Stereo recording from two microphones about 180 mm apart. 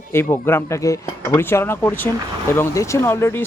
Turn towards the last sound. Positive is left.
turn(degrees=15)  # may be behind; listen again after turning